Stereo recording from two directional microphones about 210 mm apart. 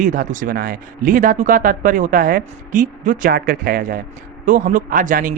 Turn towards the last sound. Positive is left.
turn(degrees=-40)  # may be behind; listen again after turning